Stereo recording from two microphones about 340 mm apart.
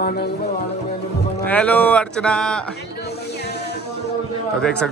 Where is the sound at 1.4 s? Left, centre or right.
Centre.